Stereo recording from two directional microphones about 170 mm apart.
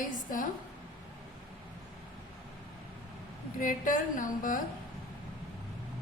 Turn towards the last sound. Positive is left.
turn(degrees=50)  # may be behind; listen again after turning